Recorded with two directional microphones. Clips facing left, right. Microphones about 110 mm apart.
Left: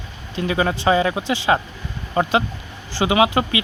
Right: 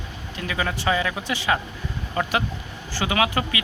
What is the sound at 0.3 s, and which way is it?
Speech, 30° left (ahead or behind).